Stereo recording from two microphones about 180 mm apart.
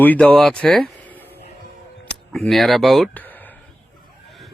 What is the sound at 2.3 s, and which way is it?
Speech, centre (ahead or behind).